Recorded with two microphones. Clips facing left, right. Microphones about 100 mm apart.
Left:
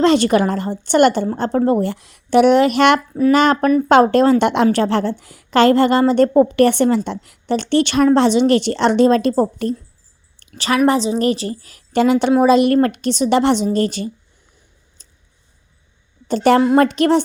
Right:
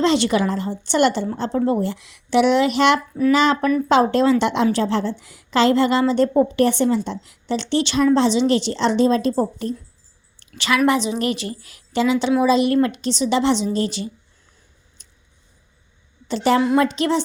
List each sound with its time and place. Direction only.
0.0 s a woman's voice: 50° left (ahead or behind); by 9.7 s 70° left (ahead or behind)
10.4 s a sound: 40° left (ahead or behind)
10.8 s a woman's voice: 35° left (ahead or behind)
11.9 s a woman's voice: 55° left (ahead or behind)
15.0 s a sound: 35° left (ahead or behind)
16.3 s a woman's voice: 50° left (ahead or behind)